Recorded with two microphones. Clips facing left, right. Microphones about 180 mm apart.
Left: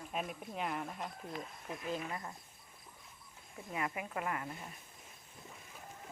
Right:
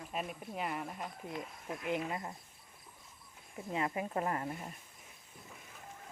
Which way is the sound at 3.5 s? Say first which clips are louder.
Right 4 dB; 25° right (ahead or behind).